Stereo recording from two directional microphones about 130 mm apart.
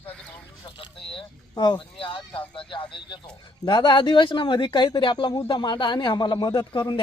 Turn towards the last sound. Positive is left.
turn(degrees=35)  # may be behind; listen again after turning